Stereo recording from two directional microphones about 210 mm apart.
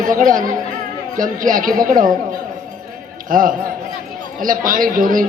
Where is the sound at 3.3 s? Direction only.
40° right (ahead or behind).